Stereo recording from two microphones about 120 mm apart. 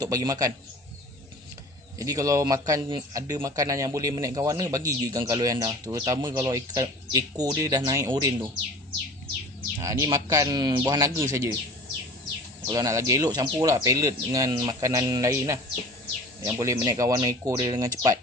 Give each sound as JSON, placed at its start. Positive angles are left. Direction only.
{"t": 0.0, "sound": "a man's voice", "side_deg": -30}
{"t": 2.0, "sound": "a man's voice", "side_deg": -30}
{"t": 9.7, "sound": "speech", "side_deg": -30}
{"t": 12.6, "sound": "a man's voice", "side_deg": -30}